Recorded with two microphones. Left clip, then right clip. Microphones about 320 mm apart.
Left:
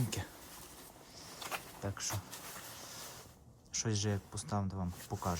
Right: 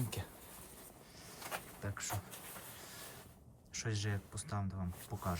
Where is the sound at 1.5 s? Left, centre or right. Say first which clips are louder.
Left 3 dB; centre.